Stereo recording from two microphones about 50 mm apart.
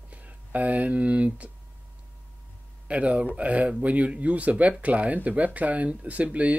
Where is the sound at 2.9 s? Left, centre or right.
Right.